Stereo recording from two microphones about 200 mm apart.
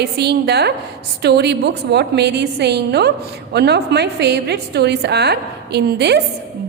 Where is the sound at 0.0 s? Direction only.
55° right (ahead or behind).